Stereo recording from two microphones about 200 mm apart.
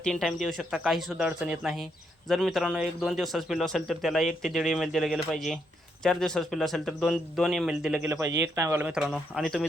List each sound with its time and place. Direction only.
0.0 s speech: 5° left (ahead or behind)